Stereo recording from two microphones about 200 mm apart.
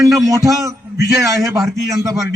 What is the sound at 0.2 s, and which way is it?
A man's voice, 15° right (ahead or behind).